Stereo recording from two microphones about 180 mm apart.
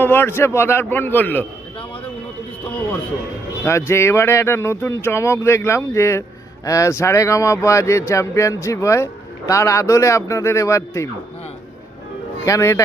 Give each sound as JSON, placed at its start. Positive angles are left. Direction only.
{"t": 0.0, "sound": "speech", "side_deg": 10}
{"t": 3.6, "sound": "speech", "side_deg": 15}
{"t": 12.5, "sound": "speech", "side_deg": 15}